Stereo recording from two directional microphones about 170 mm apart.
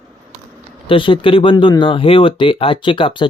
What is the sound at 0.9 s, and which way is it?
Speech, 30° left (ahead or behind).